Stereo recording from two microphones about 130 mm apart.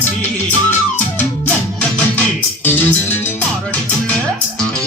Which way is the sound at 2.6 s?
15° left (ahead or behind).